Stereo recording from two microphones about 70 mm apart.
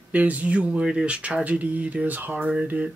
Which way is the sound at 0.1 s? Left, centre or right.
Right.